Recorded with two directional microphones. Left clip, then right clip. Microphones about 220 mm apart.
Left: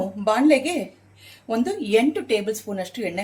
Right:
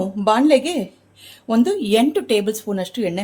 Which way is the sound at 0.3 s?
50° right (ahead or behind).